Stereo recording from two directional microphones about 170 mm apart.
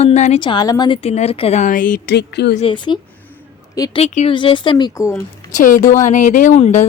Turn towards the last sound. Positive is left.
turn(degrees=45)  # may be behind; listen again after turning